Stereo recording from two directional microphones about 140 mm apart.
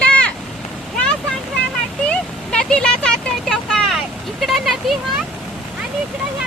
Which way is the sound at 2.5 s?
5° left (ahead or behind).